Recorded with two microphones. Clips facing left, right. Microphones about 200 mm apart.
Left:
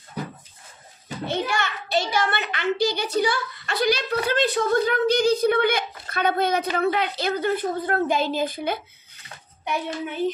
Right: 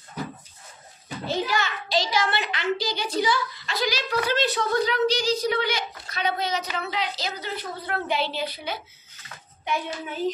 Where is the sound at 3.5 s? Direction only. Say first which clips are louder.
Left 5 dB; 55° left (ahead or behind).